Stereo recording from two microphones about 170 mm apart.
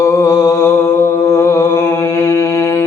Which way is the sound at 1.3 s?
15° left (ahead or behind).